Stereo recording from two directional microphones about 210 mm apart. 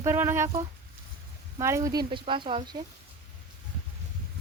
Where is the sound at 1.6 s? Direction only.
15° right (ahead or behind).